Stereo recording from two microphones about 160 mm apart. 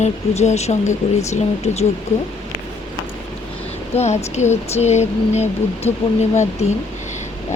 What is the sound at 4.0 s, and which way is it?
Speech, 45° left (ahead or behind).